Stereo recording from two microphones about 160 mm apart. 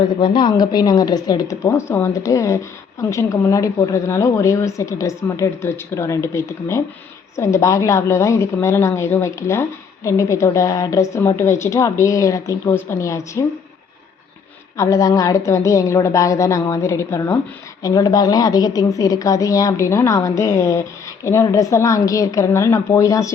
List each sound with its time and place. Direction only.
0.2 s a woman's voice: 30° left (ahead or behind)
14.8 s a woman's voice: 20° left (ahead or behind)